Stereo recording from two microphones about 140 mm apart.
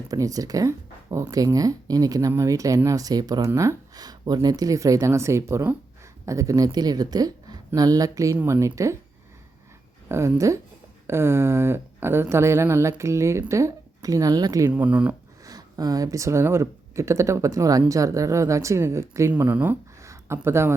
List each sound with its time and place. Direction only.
0.1 s speech: 25° right (ahead or behind)
10.1 s speech: 20° right (ahead or behind)
14.7 s speech: 10° right (ahead or behind)
15.4 s speech: 25° right (ahead or behind)